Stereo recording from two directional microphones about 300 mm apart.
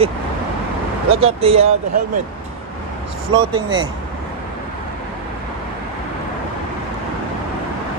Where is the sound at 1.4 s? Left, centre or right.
Centre.